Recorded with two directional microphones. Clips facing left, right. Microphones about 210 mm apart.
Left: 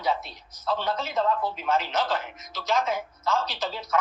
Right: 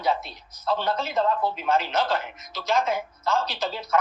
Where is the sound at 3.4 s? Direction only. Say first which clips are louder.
Right 2 dB; 30° right (ahead or behind).